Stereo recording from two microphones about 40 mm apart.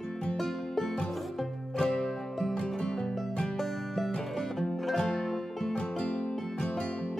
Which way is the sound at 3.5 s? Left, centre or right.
Centre.